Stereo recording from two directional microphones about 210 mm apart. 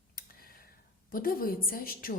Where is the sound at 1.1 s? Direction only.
45° left (ahead or behind).